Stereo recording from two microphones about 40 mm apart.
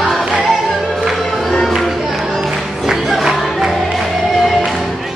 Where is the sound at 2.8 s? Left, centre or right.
Centre.